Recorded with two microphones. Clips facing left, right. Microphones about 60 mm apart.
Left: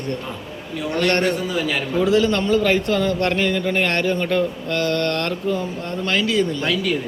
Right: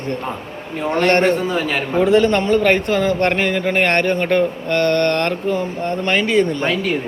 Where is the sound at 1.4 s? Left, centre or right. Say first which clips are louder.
Right 3 dB; right.